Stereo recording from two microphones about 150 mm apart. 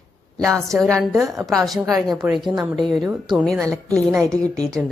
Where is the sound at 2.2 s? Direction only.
5° right (ahead or behind).